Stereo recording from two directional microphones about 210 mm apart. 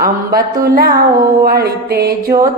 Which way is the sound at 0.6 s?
45° right (ahead or behind).